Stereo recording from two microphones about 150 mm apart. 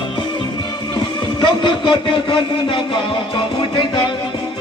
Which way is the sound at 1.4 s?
35° left (ahead or behind).